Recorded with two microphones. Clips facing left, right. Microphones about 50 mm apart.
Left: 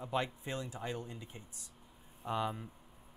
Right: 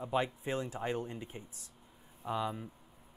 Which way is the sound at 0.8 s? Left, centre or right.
Right.